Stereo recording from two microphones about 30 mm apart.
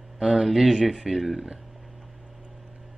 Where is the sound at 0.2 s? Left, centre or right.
Centre.